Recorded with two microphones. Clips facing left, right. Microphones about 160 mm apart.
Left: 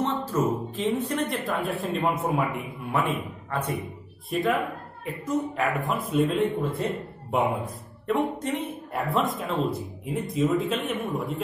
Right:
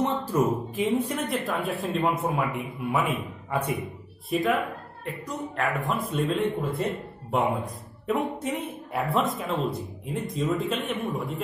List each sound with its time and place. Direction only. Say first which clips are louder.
0.0 s a sound: right 1 dB; 15° right (ahead or behind)
0.7 s speech: right 1 dB; 10° right (ahead or behind)
4.3 s speech: even; centre (ahead or behind)
8.1 s speech: left 1 dB; 5° right (ahead or behind)